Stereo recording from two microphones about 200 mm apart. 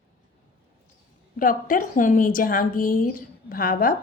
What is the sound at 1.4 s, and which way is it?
A woman's voice, 45° left (ahead or behind).